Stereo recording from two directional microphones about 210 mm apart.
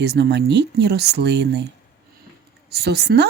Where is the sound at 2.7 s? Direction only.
50° right (ahead or behind).